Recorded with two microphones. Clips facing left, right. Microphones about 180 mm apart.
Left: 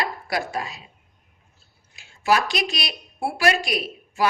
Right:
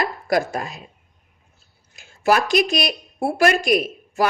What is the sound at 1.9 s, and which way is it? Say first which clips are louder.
A woman's voice: right 3 dB; 50° right (ahead or behind).